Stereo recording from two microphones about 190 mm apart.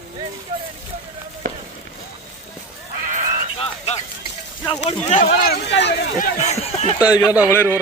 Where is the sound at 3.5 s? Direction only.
30° left (ahead or behind).